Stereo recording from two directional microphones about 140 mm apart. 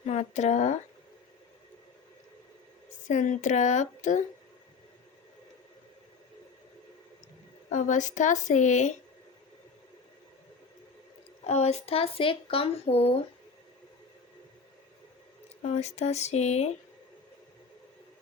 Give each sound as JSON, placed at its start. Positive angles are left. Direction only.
{"t": 0.0, "sound": "speech", "side_deg": 55}
{"t": 3.1, "sound": "a woman's voice", "side_deg": 60}
{"t": 7.7, "sound": "a woman's voice", "side_deg": 60}
{"t": 11.4, "sound": "speech", "side_deg": 50}
{"t": 15.6, "sound": "speech", "side_deg": 55}